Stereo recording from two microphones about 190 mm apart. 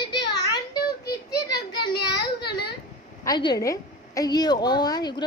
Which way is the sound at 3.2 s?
20° left (ahead or behind).